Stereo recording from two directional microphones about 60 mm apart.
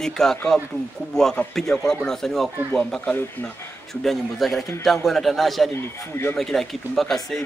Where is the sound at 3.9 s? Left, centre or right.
Centre.